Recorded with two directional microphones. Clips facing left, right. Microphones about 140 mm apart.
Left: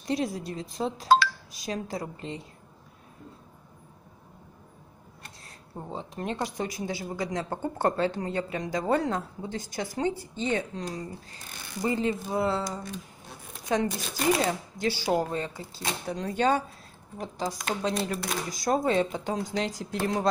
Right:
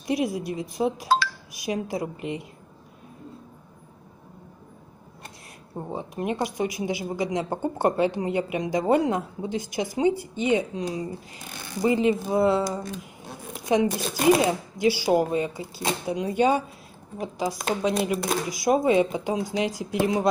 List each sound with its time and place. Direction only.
0.0 s speech: 10° right (ahead or behind)
5.8 s speech: 15° right (ahead or behind)
13.6 s tearing: 15° right (ahead or behind)
13.8 s speech: 35° right (ahead or behind)
14.2 s speech: 10° right (ahead or behind)